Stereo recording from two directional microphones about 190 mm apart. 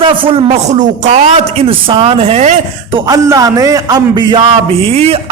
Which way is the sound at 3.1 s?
15° right (ahead or behind).